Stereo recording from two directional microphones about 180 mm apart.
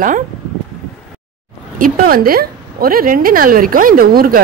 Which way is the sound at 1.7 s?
50° right (ahead or behind).